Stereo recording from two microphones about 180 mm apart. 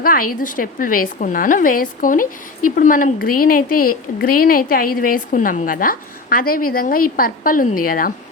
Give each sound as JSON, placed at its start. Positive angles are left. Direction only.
{"t": 0.0, "sound": "a woman's voice", "side_deg": 50}